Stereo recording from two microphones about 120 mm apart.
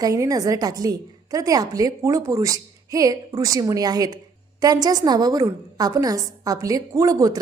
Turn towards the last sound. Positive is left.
turn(degrees=-30)  # may be behind; listen again after turning